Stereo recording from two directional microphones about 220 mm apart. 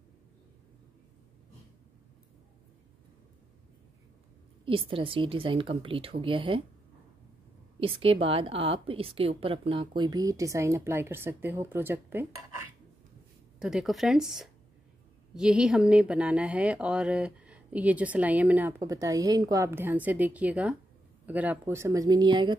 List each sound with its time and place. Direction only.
4.6 s speech: 25° right (ahead or behind)
8.0 s speech: 25° right (ahead or behind)